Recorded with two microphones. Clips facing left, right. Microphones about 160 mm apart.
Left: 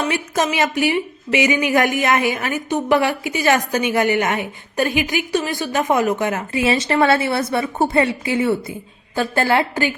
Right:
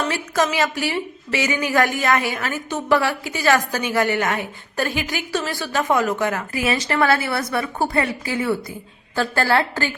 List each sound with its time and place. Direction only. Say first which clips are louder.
0.0 s a woman's voice: left 1 dB; 20° left (ahead or behind)